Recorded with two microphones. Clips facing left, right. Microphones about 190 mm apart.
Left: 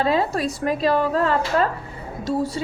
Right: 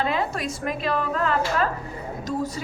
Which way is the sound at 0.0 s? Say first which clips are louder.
Left 5 dB; 35° left (ahead or behind).